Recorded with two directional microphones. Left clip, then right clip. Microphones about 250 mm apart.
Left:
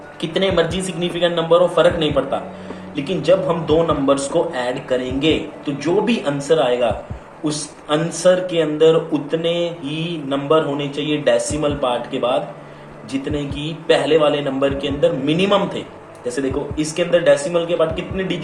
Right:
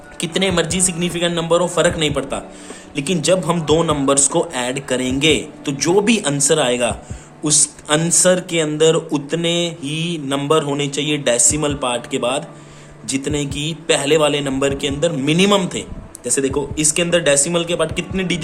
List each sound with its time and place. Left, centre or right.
0.2 s a man's voice: right